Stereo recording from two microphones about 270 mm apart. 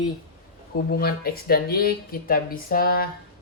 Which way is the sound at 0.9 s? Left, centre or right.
Left.